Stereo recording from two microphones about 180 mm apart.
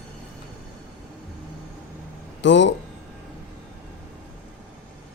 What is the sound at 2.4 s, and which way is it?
Speech, 85° left.